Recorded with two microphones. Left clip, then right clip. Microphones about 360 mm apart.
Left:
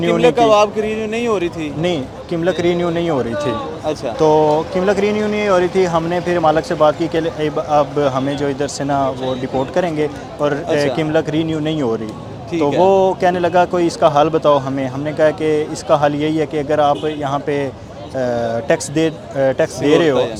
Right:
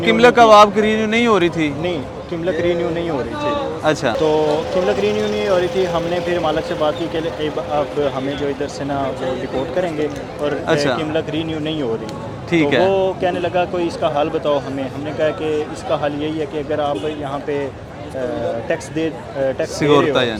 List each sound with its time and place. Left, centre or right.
0.1 s speech: right
2.4 s speech: left
3.9 s speech: right
4.2 s speech: left
12.5 s speech: right
12.8 s speech: left
18.7 s speech: left